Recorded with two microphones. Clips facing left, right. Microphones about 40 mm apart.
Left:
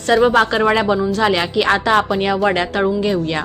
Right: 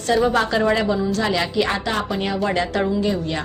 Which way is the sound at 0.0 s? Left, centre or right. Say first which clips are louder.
Left 5 dB; left.